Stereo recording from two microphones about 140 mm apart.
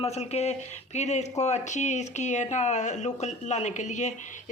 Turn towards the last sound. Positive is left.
turn(degrees=60)  # may be behind; listen again after turning